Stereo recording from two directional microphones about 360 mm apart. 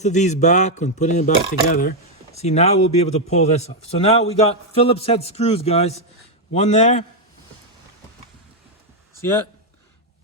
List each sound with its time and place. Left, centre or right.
0.0 s a man's voice: centre
9.2 s speech: centre